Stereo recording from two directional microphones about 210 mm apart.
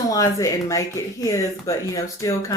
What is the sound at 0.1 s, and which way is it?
Speech, 15° left (ahead or behind).